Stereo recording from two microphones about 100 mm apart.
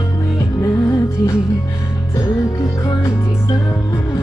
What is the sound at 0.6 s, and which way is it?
Music, 30° left (ahead or behind).